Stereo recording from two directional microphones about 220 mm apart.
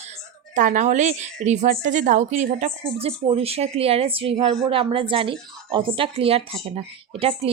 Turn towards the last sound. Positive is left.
turn(degrees=-25)  # may be behind; listen again after turning